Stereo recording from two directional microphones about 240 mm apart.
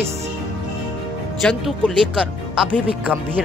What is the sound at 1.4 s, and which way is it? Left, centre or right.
Speech, centre.